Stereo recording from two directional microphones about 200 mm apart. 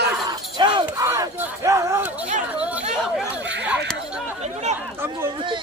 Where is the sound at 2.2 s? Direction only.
40° right (ahead or behind).